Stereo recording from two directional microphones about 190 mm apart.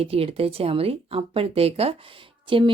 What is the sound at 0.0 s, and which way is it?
Speech, 30° right (ahead or behind).